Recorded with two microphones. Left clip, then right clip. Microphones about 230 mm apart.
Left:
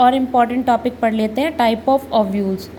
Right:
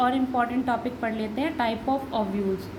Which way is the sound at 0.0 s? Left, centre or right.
Left.